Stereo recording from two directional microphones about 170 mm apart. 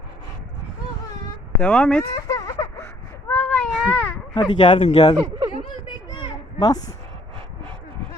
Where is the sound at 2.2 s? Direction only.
20° left (ahead or behind).